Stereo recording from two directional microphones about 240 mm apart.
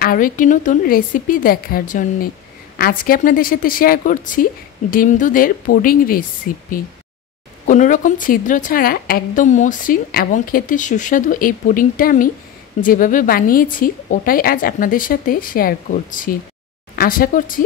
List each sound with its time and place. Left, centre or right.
0.0 s a woman's voice: left